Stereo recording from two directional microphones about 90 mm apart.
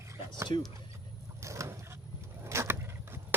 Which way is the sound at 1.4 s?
35° right (ahead or behind).